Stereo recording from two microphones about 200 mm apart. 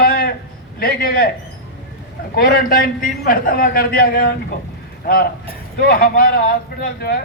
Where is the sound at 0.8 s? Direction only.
50° left (ahead or behind).